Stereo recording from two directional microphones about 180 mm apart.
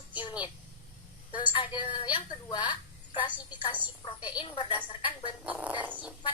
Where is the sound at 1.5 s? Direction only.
25° left (ahead or behind).